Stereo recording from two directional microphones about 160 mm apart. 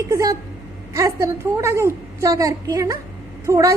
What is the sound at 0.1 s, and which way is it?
A woman's voice, 20° right (ahead or behind).